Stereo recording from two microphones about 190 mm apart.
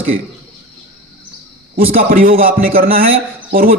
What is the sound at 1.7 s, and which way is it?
A man's voice, 50° right (ahead or behind).